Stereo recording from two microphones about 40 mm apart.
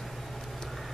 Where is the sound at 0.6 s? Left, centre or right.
Centre.